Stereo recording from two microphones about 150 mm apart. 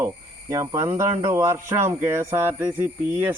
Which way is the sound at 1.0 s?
20° right (ahead or behind).